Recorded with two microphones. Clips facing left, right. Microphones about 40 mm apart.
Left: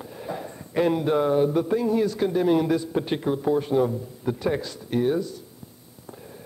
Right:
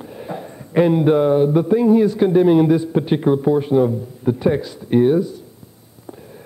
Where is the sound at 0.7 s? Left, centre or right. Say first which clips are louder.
Right 7 dB; right.